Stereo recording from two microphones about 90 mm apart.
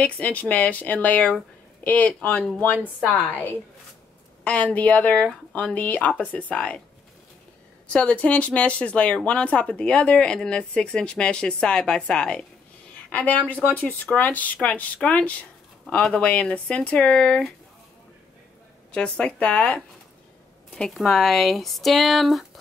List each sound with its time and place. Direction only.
0.0 s speech: 15° left (ahead or behind)
4.7 s speech: 15° left (ahead or behind)
7.9 s speech: 10° left (ahead or behind)
18.9 s speech: 10° left (ahead or behind)
21.0 s speech: 5° left (ahead or behind)